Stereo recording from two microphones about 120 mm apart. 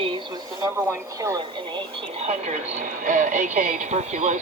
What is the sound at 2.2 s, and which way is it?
Speech, 65° right (ahead or behind).